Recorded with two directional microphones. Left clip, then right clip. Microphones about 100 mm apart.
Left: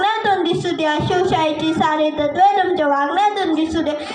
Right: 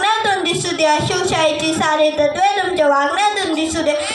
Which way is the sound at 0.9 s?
50° right (ahead or behind).